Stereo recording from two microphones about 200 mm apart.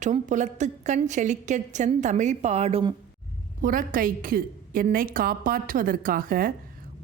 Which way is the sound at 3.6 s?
45° right (ahead or behind).